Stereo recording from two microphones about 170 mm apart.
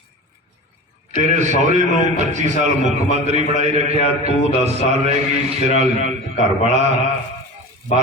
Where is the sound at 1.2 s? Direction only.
45° right (ahead or behind).